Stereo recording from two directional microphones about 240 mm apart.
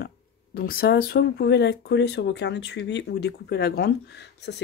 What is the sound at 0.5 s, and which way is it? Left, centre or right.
Speech, left.